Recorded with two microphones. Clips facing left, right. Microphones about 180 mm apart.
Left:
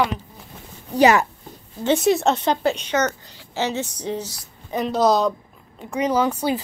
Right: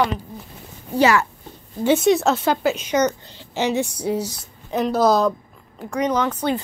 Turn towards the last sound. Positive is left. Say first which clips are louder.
# left 1 dB
turn(degrees=10)  # may be behind; listen again after turning